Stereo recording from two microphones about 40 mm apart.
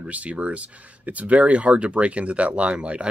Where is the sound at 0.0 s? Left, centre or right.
Right.